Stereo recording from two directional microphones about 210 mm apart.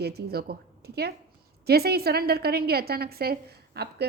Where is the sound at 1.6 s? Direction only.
50° right (ahead or behind).